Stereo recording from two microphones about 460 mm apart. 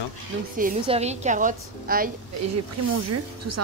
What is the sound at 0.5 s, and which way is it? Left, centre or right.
A woman's voice, centre.